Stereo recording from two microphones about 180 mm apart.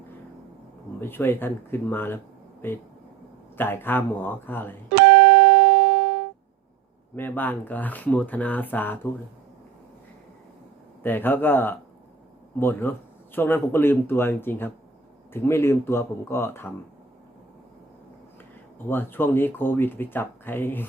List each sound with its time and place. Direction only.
1.0 s speech: 10° left (ahead or behind)
4.9 s music: 75° right (ahead or behind)
7.2 s speech: 10° left (ahead or behind)
11.0 s speech: 10° left (ahead or behind)
18.9 s speech: 10° left (ahead or behind)